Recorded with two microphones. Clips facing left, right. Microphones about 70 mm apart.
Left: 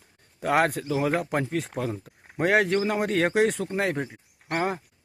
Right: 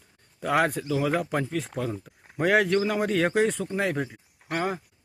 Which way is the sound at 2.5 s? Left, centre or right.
Left.